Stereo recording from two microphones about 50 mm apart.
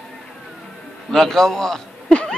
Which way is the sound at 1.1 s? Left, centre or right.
Centre.